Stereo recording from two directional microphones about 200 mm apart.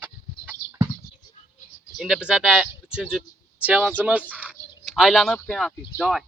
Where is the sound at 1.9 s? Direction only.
Centre (ahead or behind).